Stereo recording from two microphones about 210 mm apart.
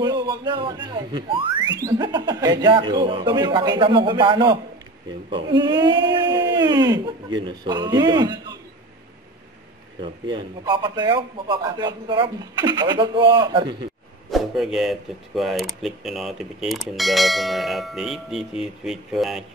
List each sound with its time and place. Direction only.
0.0 s a man's voice: 20° right (ahead or behind)
10.0 s a man's voice: 20° right (ahead or behind)
14.3 s speech: centre (ahead or behind)